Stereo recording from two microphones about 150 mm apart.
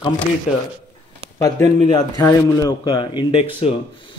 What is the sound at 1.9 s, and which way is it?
Speech, 25° left (ahead or behind).